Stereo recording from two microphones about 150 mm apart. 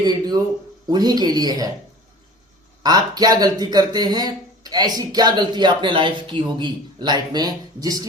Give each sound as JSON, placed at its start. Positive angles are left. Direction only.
{"t": 0.0, "sound": "speech", "side_deg": -30}
{"t": 2.8, "sound": "speech", "side_deg": -25}